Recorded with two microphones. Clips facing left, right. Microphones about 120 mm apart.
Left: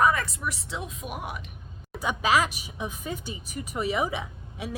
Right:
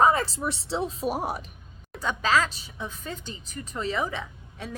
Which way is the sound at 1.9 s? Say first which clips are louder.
Even; 15° left (ahead or behind).